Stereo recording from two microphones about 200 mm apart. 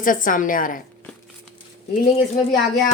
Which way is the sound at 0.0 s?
40° left (ahead or behind).